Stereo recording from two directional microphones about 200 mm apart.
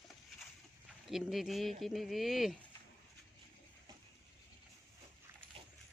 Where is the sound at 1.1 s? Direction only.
Centre (ahead or behind).